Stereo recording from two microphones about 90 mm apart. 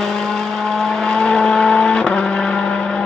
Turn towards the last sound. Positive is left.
turn(degrees=10)  # may be behind; listen again after turning